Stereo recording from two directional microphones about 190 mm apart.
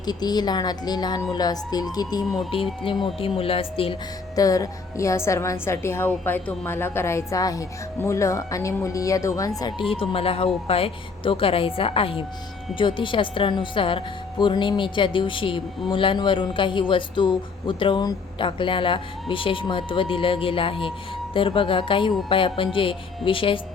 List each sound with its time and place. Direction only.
0.0 s speech: 20° left (ahead or behind)
4.4 s a woman's voice: 20° left (ahead or behind)